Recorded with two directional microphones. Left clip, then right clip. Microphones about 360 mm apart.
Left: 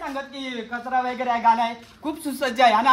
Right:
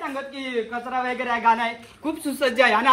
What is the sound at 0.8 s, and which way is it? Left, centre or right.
Speech, centre.